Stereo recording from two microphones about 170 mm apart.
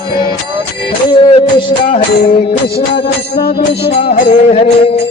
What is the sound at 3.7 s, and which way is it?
Music, 35° left (ahead or behind).